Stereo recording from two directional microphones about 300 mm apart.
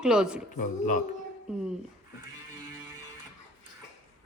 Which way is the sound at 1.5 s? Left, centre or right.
Centre.